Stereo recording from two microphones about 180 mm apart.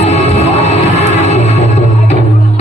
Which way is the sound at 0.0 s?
35° left (ahead or behind).